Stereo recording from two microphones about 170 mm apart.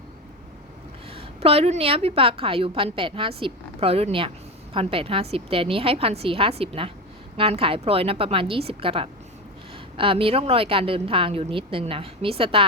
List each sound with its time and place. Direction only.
1.1 s a woman's voice: 35° right (ahead or behind)